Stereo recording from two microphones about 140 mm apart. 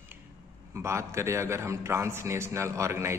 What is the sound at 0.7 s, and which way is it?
A man's voice, 20° right (ahead or behind).